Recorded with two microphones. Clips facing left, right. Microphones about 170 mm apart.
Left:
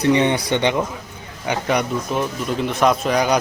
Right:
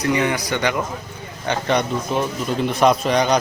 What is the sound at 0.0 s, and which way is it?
Speech, 30° left (ahead or behind).